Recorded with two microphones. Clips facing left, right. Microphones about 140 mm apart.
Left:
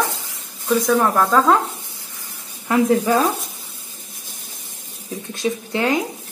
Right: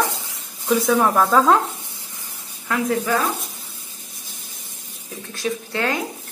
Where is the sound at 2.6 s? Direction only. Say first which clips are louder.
Left 5 dB; 30° left (ahead or behind).